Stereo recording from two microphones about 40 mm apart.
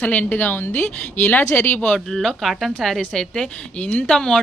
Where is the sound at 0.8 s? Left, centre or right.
Left.